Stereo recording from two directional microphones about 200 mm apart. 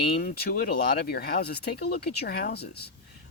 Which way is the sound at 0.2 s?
50° left (ahead or behind).